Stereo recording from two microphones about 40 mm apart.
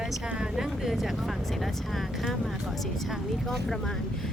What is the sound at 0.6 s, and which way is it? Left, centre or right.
Speech, centre.